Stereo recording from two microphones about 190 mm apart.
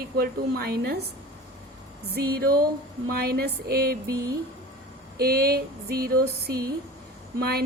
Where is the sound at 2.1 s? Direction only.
55° right (ahead or behind).